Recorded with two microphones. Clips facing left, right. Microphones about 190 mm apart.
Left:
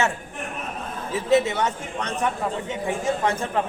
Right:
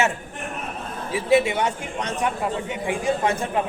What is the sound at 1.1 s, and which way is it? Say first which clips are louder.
A man's voice: right 1 dB; 15° right (ahead or behind).